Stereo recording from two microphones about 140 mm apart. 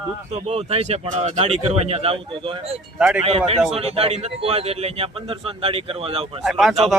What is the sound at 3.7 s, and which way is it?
A man's voice, 45° right (ahead or behind).